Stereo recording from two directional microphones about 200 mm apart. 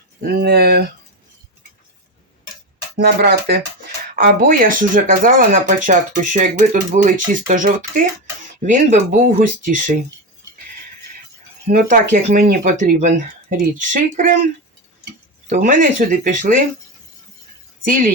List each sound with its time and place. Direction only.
0.2 s speech: 50° right (ahead or behind)
3.0 s speech: 50° right (ahead or behind)
11.6 s speech: 40° right (ahead or behind)
15.4 s speech: 40° right (ahead or behind)